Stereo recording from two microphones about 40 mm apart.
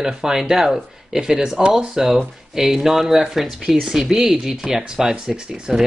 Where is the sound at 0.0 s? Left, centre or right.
Centre.